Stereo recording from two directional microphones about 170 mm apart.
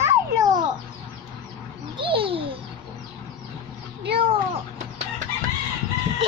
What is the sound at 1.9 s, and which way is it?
Babbling, 30° right (ahead or behind).